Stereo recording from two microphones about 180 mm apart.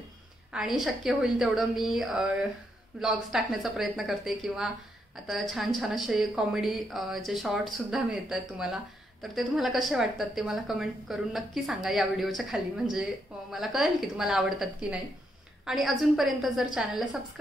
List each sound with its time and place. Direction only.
0.5 s a woman's voice: centre (ahead or behind)